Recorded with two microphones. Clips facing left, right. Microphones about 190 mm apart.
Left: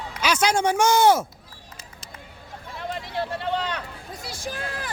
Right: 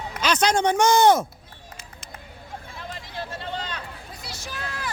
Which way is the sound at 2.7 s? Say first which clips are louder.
Left 7 dB; 60° left (ahead or behind).